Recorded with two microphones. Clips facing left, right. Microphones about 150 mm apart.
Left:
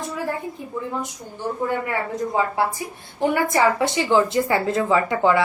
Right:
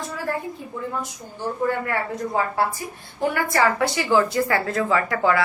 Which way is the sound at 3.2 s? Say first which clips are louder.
Left 2 dB; 20° left (ahead or behind).